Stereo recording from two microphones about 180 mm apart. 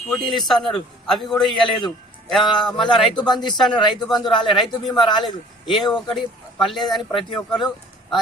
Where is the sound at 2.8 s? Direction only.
25° left (ahead or behind).